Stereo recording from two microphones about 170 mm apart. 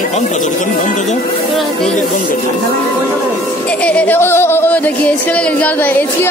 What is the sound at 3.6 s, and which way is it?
Music, 5° left (ahead or behind).